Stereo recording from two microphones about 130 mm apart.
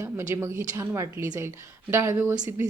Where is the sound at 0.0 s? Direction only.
15° right (ahead or behind).